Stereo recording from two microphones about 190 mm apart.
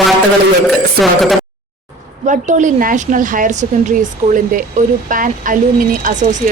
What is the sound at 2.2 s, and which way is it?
Speech, 40° right (ahead or behind).